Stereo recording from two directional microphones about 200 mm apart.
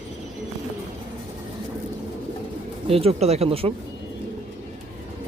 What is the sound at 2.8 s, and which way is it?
Speech, 30° right (ahead or behind).